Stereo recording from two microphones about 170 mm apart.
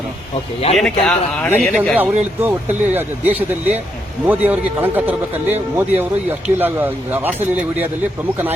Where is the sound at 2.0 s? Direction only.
10° right (ahead or behind).